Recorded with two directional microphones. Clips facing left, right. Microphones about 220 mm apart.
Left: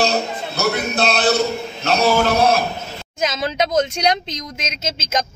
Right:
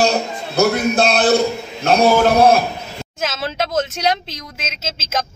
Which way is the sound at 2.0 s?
50° right (ahead or behind).